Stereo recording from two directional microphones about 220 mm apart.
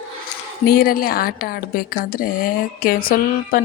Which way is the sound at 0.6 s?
45° left (ahead or behind).